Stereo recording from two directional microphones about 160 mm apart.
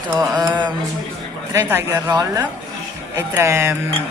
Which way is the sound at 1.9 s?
25° right (ahead or behind).